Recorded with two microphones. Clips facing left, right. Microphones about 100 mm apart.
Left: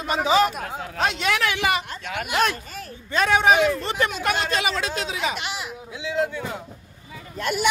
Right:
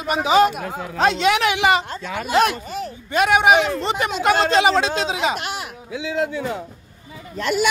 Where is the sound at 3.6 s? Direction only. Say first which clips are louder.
Left 1 dB; 35° right (ahead or behind).